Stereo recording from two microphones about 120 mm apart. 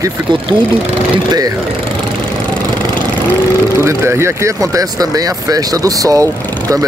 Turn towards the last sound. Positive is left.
turn(degrees=-30)  # may be behind; listen again after turning